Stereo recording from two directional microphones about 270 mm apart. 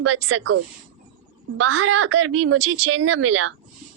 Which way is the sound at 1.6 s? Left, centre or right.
Right.